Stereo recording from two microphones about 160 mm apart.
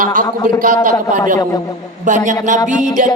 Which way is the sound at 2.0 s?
50° right (ahead or behind).